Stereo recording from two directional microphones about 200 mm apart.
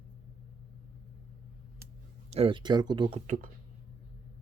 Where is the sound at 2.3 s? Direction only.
25° right (ahead or behind).